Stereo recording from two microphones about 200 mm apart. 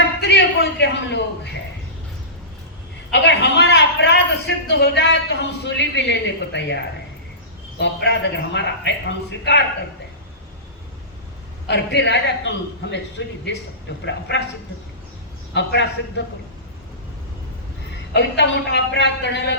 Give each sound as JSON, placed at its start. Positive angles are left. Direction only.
{"t": 0.2, "sound": "a man's voice", "side_deg": 60}
{"t": 3.1, "sound": "a man's voice", "side_deg": 60}
{"t": 7.8, "sound": "a man's voice", "side_deg": 60}
{"t": 11.7, "sound": "a man's voice", "side_deg": 60}
{"t": 15.5, "sound": "a man's voice", "side_deg": 60}
{"t": 18.1, "sound": "a man's voice", "side_deg": 60}